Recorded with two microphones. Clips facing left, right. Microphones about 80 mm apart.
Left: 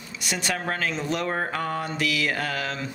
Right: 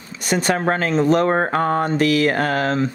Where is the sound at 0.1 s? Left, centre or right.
Right.